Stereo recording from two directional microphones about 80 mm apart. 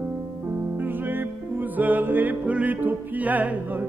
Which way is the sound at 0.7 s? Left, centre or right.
Right.